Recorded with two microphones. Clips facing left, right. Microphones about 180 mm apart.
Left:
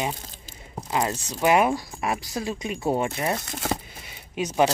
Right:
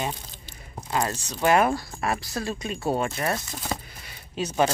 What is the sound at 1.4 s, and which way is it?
Speech, 15° left (ahead or behind).